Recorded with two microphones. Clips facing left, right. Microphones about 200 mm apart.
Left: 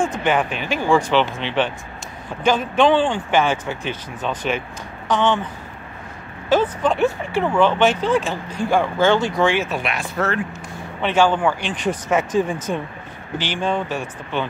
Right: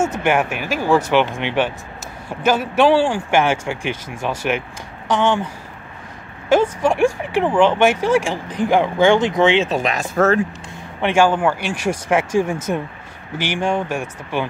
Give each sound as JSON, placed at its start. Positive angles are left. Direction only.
{"t": 0.1, "sound": "speech", "side_deg": -10}
{"t": 6.5, "sound": "speech", "side_deg": -10}
{"t": 9.7, "sound": "speech", "side_deg": -40}
{"t": 11.0, "sound": "speech", "side_deg": -10}